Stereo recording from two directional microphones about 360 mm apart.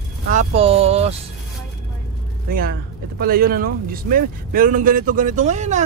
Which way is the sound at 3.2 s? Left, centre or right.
Right.